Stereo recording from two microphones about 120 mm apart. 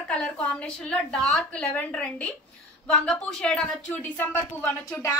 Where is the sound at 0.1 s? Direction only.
5° left (ahead or behind).